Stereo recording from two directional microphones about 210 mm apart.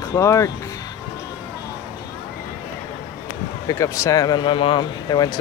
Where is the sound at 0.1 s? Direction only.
15° left (ahead or behind).